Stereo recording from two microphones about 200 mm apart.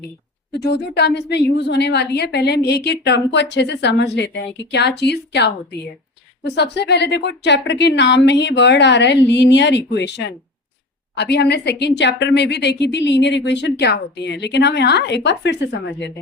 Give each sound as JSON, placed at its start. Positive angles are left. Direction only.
{"t": 0.5, "sound": "a woman's voice", "side_deg": 55}